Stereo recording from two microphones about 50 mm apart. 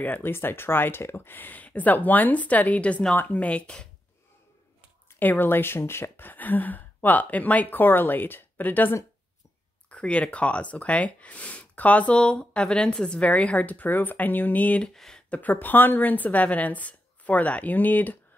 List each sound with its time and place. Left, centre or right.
0.0 s speech: left
0.3 s speech: left; by 3.9 s centre
5.2 s speech: left
9.8 s speech: left
15.0 s a sound: centre
15.2 s speech: left
15.5 s speech: left